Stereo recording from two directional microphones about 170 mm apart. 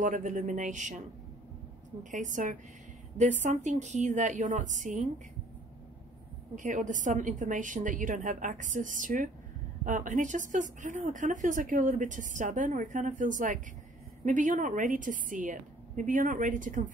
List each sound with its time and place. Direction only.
0.0 s speech: 50° right (ahead or behind)
2.0 s speech: 45° right (ahead or behind)
6.5 s speech: 50° right (ahead or behind)